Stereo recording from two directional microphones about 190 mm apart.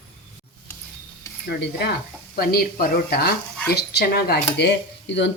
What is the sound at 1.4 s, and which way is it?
A woman's voice, 55° left (ahead or behind).